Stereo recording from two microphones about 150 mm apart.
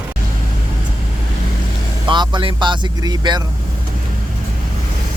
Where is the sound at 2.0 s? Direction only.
30° right (ahead or behind).